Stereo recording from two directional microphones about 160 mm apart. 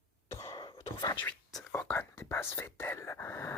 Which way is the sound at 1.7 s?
10° left (ahead or behind).